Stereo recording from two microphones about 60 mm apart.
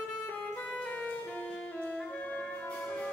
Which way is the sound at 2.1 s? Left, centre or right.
Left.